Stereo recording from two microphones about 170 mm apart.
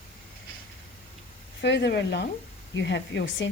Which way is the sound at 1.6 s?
85° left.